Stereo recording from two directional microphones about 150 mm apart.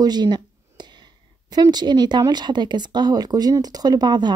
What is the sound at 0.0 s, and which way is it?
Speech, 30° right (ahead or behind).